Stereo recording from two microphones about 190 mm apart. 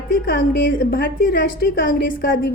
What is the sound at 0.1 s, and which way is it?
A woman's voice, 45° left (ahead or behind).